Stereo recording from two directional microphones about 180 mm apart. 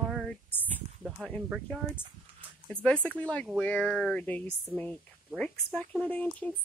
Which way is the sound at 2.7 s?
5° left (ahead or behind).